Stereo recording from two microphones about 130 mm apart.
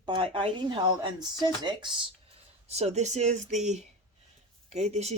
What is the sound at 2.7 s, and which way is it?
Speech, 55° right (ahead or behind).